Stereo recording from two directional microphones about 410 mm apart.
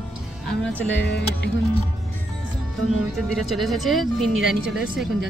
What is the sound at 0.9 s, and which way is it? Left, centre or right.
Speech, left.